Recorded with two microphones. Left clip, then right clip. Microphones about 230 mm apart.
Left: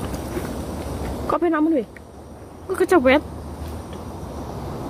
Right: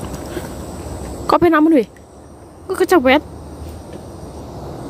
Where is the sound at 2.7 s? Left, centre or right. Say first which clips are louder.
Right 3 dB; centre.